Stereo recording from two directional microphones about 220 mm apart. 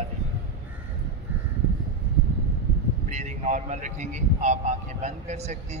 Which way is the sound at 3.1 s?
30° right (ahead or behind).